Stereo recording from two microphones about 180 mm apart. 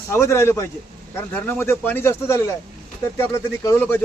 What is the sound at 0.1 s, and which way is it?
Speech, 15° left (ahead or behind).